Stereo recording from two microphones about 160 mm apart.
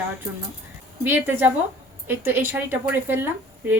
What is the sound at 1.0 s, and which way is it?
A woman's voice, 10° right (ahead or behind).